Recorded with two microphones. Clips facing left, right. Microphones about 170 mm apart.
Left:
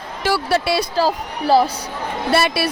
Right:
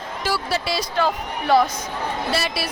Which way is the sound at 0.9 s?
35° left (ahead or behind).